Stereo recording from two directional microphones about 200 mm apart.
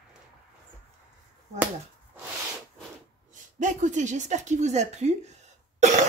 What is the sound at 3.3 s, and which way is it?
A woman's voice, 40° right (ahead or behind).